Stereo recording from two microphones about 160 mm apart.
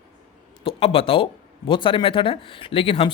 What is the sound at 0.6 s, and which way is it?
Speech, 35° left (ahead or behind).